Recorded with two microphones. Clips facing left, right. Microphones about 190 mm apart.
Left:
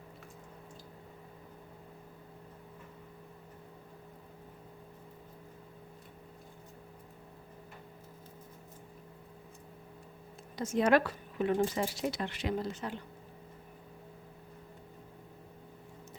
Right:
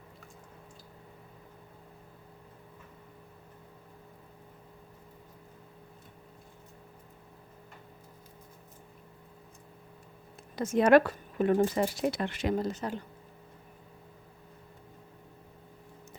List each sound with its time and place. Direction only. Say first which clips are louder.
10.5 s speech: right 5 dB; 60° right (ahead or behind); by 13.0 s 40° right (ahead or behind)